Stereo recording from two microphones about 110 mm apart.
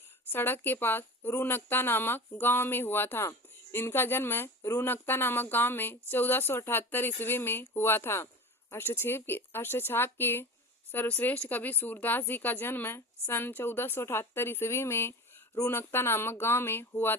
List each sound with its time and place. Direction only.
0.3 s speech: 20° left (ahead or behind)